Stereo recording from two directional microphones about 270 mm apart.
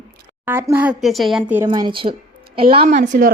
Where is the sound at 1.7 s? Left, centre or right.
Centre.